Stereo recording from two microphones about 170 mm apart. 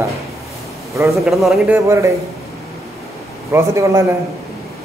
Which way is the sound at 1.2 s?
Centre (ahead or behind).